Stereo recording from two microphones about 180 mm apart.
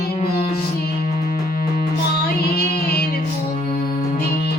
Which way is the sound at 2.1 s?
60° left (ahead or behind).